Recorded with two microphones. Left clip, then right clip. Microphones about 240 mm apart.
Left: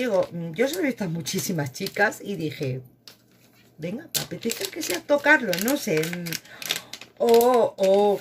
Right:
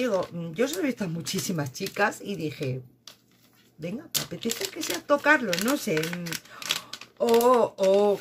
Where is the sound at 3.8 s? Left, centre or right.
Centre.